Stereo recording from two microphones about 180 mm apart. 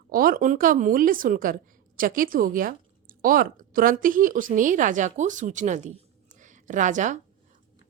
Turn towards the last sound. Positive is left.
turn(degrees=-45)  # may be behind; listen again after turning